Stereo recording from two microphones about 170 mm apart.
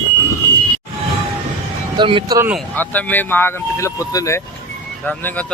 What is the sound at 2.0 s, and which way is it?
Speech, 30° right (ahead or behind).